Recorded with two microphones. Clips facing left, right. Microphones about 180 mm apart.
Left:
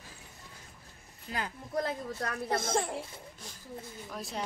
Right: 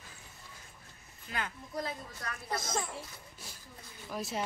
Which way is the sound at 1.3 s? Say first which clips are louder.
Left 2 dB; 35° left (ahead or behind).